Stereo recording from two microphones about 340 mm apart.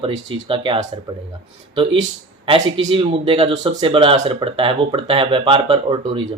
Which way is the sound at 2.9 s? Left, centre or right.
Centre.